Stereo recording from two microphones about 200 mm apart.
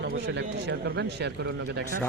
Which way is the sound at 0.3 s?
60° right (ahead or behind).